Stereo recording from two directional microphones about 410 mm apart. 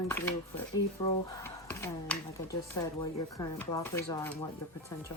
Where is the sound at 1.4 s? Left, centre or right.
Centre.